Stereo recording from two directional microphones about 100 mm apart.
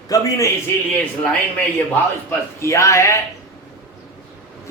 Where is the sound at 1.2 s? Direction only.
10° left (ahead or behind).